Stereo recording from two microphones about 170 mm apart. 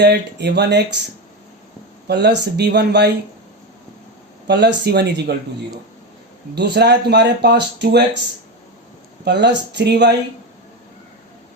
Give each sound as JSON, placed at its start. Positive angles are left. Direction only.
{"t": 0.0, "sound": "speech", "side_deg": -75}
{"t": 2.0, "sound": "speech", "side_deg": -85}
{"t": 4.4, "sound": "speech", "side_deg": -85}
{"t": 6.5, "sound": "speech", "side_deg": -80}
{"t": 9.2, "sound": "speech", "side_deg": -90}